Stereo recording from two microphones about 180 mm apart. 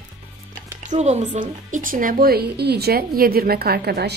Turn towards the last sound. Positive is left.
turn(degrees=-65)  # may be behind; listen again after turning